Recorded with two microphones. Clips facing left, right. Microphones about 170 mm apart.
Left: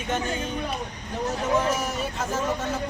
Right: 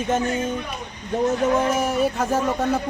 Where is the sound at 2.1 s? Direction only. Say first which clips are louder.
Right 5 dB; 60° right (ahead or behind).